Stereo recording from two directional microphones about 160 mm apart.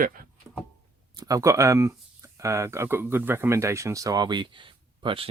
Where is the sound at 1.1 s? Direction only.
20° right (ahead or behind).